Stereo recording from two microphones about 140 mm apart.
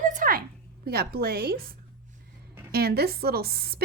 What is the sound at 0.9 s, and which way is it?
Speech, 90° right.